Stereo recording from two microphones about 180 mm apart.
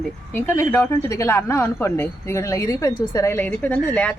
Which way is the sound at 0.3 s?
15° left (ahead or behind).